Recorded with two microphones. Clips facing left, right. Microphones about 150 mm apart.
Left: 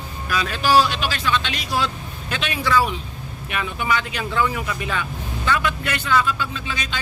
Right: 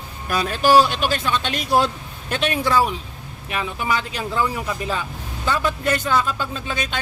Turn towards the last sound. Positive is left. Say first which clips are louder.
# right 2 dB
turn(degrees=-55)  # may be behind; listen again after turning